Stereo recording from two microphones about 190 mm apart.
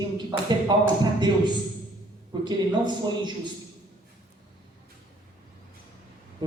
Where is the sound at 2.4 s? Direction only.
25° right (ahead or behind).